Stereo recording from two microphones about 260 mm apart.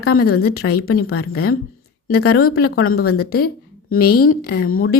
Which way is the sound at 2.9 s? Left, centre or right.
Left.